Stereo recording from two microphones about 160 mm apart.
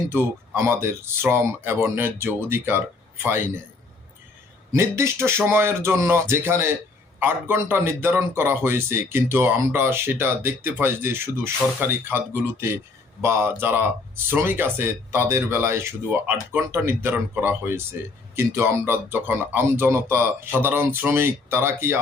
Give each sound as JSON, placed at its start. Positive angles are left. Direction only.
{"t": 0.1, "sound": "a man's voice", "side_deg": -15}
{"t": 4.7, "sound": "a man's voice", "side_deg": -15}